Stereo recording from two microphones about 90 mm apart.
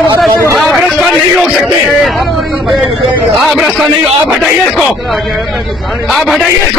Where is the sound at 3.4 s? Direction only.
Centre (ahead or behind).